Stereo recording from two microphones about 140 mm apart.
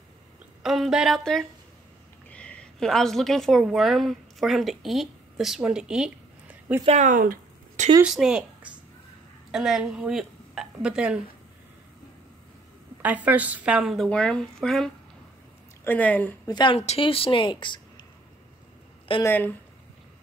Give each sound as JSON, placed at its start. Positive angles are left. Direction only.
{"t": 0.6, "sound": "a woman's voice", "side_deg": 0}
{"t": 6.8, "sound": "speech", "side_deg": -45}
{"t": 7.1, "sound": "a sound", "side_deg": -75}
{"t": 8.0, "sound": "a woman's voice", "side_deg": -5}
{"t": 9.5, "sound": "speech", "side_deg": -5}
{"t": 13.0, "sound": "a woman's voice", "side_deg": -10}
{"t": 14.0, "sound": "a woman's voice", "side_deg": 5}
{"t": 16.4, "sound": "a woman's voice", "side_deg": 30}
{"t": 16.7, "sound": "a woman's voice", "side_deg": 45}
{"t": 19.2, "sound": "a woman's voice", "side_deg": 15}